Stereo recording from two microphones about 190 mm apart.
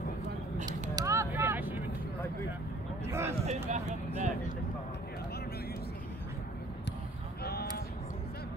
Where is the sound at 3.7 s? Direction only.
35° right (ahead or behind).